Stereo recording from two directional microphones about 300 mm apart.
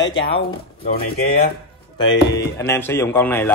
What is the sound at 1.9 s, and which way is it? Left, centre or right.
Speech, centre.